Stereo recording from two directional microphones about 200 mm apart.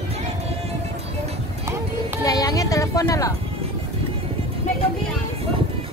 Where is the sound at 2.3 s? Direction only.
15° left (ahead or behind).